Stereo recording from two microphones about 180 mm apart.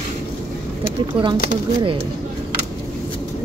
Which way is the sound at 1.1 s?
25° right (ahead or behind).